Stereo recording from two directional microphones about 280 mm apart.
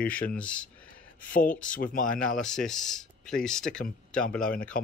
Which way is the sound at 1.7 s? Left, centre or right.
Left.